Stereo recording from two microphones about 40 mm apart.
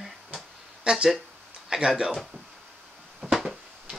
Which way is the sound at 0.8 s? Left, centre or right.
Centre.